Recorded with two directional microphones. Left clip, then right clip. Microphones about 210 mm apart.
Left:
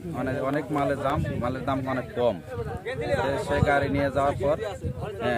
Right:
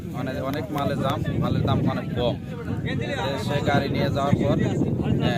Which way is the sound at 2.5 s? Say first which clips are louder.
Even; 55° left (ahead or behind).